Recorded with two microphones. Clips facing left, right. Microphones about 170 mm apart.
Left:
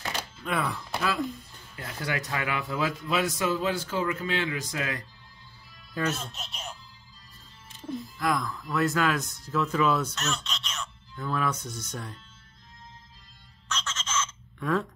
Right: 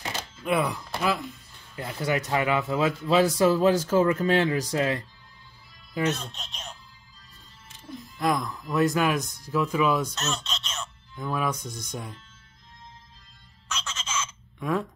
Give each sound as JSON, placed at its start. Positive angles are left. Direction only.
{"t": 0.5, "sound": "speech", "side_deg": -15}
{"t": 6.1, "sound": "speech", "side_deg": 5}
{"t": 8.2, "sound": "speech", "side_deg": -20}
{"t": 10.2, "sound": "speech", "side_deg": -25}
{"t": 11.1, "sound": "speech", "side_deg": -10}
{"t": 13.7, "sound": "bleat", "side_deg": -10}